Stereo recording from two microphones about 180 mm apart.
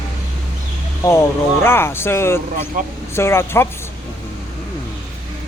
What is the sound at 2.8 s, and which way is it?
Speech, 45° right (ahead or behind).